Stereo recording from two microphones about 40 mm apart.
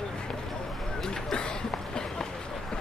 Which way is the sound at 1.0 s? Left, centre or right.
Centre.